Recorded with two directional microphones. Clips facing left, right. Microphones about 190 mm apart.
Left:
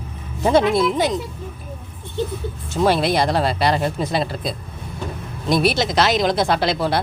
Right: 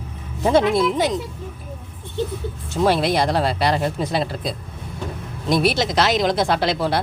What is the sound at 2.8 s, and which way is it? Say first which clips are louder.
Speech: left 1 dB; 10° right (ahead or behind).